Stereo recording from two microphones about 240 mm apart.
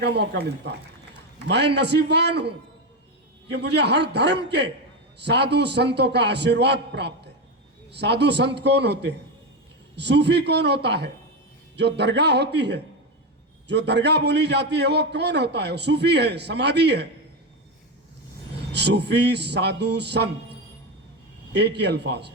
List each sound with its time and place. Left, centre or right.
0.0 s a man's voice: right
3.5 s a man's voice: right
18.7 s a man's voice: right
21.5 s a man's voice: right